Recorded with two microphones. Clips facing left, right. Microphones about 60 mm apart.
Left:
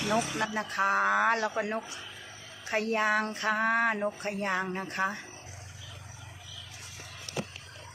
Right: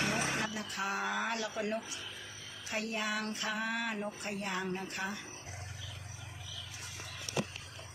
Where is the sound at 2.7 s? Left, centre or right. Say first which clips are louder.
Left 9 dB; left.